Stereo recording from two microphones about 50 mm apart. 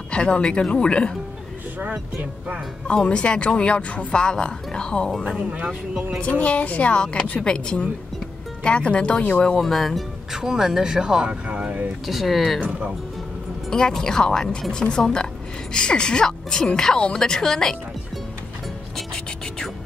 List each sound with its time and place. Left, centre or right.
0.1 s speech: centre
2.9 s speech: left
5.4 s speech: centre
6.4 s speech: left
9.6 s speech: centre
10.3 s speech: centre
11.4 s speech: right
12.1 s speech: centre
13.7 s a woman's voice: centre
18.9 s music: centre